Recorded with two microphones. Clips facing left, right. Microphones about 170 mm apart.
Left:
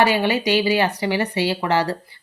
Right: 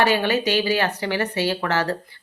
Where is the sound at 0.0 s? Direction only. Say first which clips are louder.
Left 1 dB; 15° left (ahead or behind).